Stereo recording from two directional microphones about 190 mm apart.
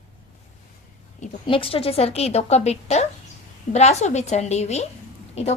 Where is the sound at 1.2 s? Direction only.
35° left (ahead or behind).